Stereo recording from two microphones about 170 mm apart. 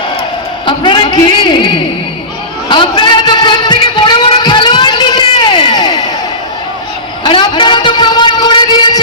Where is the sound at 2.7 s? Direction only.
30° left (ahead or behind).